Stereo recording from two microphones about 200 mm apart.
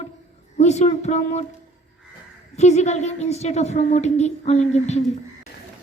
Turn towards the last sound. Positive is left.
turn(degrees=35)  # may be behind; listen again after turning